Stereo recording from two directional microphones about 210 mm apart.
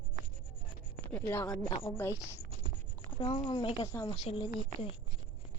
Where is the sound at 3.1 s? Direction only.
25° left (ahead or behind).